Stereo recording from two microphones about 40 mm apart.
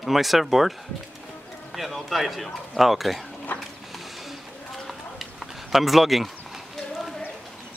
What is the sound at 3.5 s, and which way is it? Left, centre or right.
Mechanisms, left.